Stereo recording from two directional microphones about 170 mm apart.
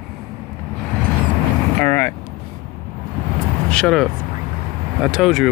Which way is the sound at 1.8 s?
15° left (ahead or behind).